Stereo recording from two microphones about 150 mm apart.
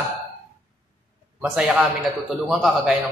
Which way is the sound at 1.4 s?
5° right (ahead or behind).